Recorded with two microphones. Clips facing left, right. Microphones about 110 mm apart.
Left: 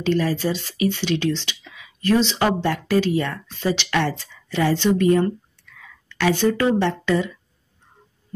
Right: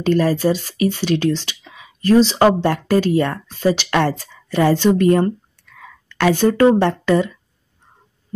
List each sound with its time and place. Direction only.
0.0 s speech: 45° right (ahead or behind)